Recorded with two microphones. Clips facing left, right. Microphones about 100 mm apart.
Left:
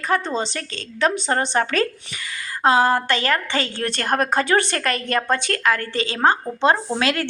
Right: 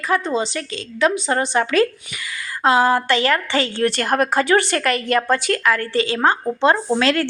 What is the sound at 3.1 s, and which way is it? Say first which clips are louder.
Speech: right 3 dB; 20° right (ahead or behind).